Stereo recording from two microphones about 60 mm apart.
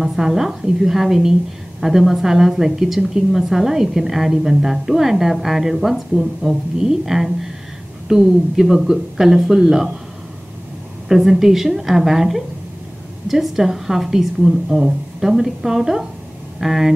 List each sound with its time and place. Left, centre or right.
0.0 s a woman's voice: centre
11.1 s a woman's voice: centre